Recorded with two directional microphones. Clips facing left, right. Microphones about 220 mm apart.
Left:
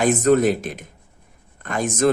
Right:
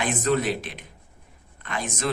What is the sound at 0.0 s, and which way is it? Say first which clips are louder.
A man's voice: left 8 dB; 45° left (ahead or behind).